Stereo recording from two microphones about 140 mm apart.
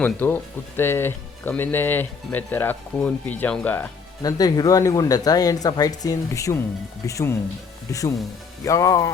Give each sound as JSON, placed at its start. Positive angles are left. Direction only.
{"t": 0.0, "sound": "speech", "side_deg": 15}
{"t": 4.2, "sound": "speech", "side_deg": 25}
{"t": 8.6, "sound": "speech", "side_deg": 20}